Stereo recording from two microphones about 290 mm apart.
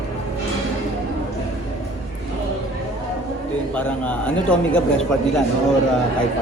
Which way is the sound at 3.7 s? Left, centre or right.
Centre.